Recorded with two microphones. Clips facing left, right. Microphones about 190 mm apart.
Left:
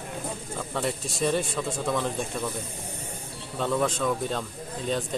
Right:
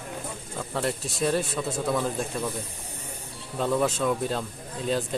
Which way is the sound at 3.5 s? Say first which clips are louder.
Right 1 dB; 5° right (ahead or behind).